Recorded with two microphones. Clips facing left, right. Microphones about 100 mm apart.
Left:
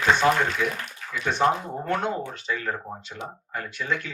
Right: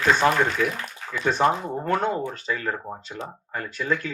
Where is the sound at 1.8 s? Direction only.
40° right (ahead or behind).